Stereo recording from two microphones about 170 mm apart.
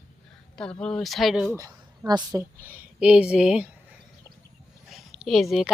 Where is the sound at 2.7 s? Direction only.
5° right (ahead or behind).